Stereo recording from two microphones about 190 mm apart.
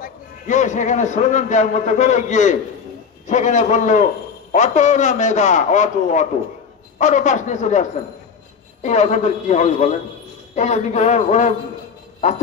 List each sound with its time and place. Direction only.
0.0 s a man's voice: 40° left (ahead or behind)